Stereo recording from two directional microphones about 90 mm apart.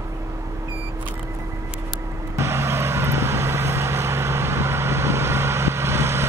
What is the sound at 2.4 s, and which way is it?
Vehicle, 30° right (ahead or behind).